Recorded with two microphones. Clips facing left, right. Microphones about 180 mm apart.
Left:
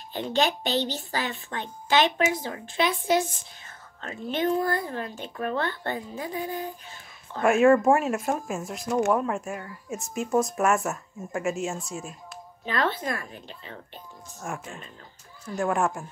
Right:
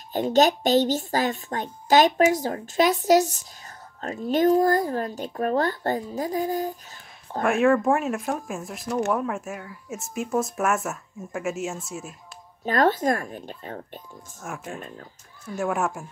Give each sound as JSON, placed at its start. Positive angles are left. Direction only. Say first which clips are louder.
{"t": 0.1, "sound": "speech", "louder": "right 6 dB", "side_deg": -45}
{"t": 7.4, "sound": "speech", "louder": "left 2 dB", "side_deg": 0}
{"t": 12.6, "sound": "speech", "louder": "right 7 dB", "side_deg": -45}
{"t": 14.5, "sound": "speech", "louder": "right 2 dB", "side_deg": -5}